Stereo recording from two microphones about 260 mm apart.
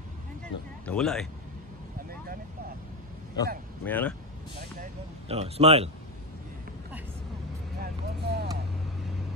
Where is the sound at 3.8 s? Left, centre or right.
Centre.